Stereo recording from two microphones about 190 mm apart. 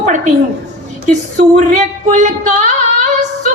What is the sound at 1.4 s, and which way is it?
A woman's voice, 40° right (ahead or behind).